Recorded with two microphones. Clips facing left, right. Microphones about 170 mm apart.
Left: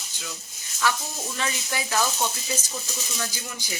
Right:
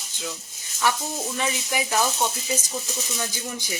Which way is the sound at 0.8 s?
20° right (ahead or behind).